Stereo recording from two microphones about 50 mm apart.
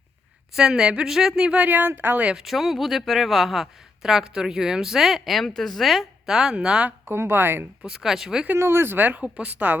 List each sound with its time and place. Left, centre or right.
0.5 s speech: centre
1.5 s a woman's voice: right
2.3 s speech: centre
5.4 s speech: centre
7.1 s a woman's voice: right
7.9 s speech: centre
8.5 s speech: right
9.0 s a woman's voice: right